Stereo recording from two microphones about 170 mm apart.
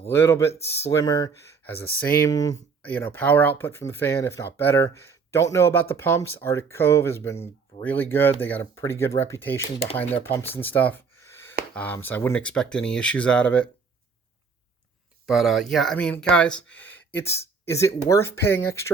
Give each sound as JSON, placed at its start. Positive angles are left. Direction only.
{"t": 0.1, "sound": "speech", "side_deg": 15}
{"t": 1.6, "sound": "speech", "side_deg": 10}
{"t": 10.3, "sound": "a sound", "side_deg": 10}
{"t": 11.7, "sound": "speech", "side_deg": 10}
{"t": 15.3, "sound": "speech", "side_deg": 0}